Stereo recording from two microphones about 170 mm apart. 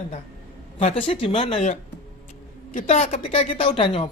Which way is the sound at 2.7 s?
40° left (ahead or behind).